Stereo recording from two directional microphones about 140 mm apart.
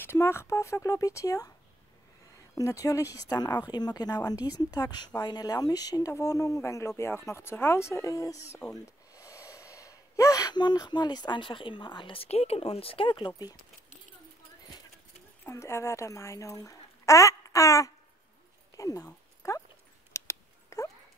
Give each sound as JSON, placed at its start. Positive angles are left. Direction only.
{"t": 0.0, "sound": "speech", "side_deg": 15}
{"t": 2.5, "sound": "speech", "side_deg": 25}
{"t": 8.6, "sound": "speech", "side_deg": 5}
{"t": 9.1, "sound": "speech", "side_deg": 20}
{"t": 15.4, "sound": "speech", "side_deg": 20}
{"t": 19.0, "sound": "a sound", "side_deg": 20}